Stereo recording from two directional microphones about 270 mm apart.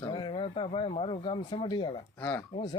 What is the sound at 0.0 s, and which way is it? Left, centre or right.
Speech, centre.